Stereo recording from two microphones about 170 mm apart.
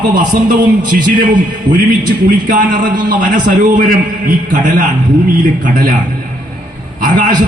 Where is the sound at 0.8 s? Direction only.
50° right (ahead or behind).